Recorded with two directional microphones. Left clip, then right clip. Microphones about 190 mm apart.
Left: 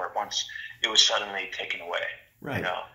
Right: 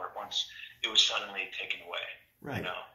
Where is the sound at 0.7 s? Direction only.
25° left (ahead or behind).